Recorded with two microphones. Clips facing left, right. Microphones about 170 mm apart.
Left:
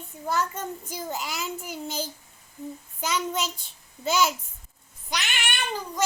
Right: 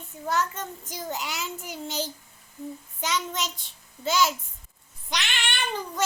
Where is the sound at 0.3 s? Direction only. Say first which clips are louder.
Even; 10° left (ahead or behind).